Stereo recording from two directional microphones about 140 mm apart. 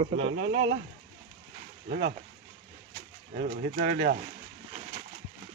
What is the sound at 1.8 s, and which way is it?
Speech, 90° right.